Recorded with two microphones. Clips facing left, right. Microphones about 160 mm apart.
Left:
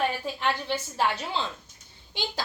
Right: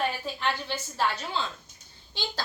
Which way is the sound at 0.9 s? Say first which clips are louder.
Even; 25° left (ahead or behind).